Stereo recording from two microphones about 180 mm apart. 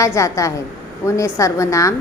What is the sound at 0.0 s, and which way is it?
A woman's voice, 15° left (ahead or behind).